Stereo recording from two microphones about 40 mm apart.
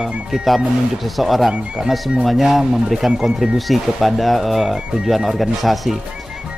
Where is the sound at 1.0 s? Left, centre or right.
Centre.